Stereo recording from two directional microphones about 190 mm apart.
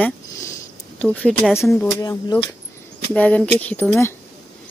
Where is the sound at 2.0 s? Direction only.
20° left (ahead or behind).